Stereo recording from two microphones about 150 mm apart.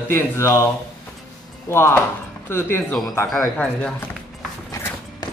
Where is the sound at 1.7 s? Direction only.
15° left (ahead or behind).